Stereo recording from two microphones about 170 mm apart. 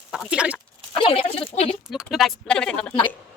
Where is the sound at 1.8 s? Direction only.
Centre (ahead or behind).